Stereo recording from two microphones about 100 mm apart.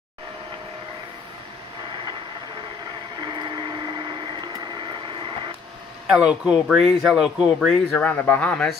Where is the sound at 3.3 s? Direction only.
50° right (ahead or behind).